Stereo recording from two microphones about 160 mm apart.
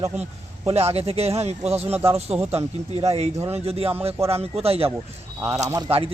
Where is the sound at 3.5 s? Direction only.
40° right (ahead or behind).